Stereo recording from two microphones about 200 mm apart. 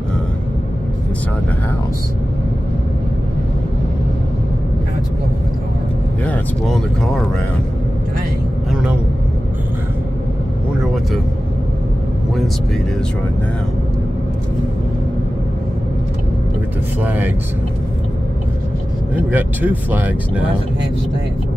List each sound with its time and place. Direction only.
6.2 s speech: 5° left (ahead or behind)
17.0 s speech: 10° right (ahead or behind)
19.1 s speech: 10° right (ahead or behind)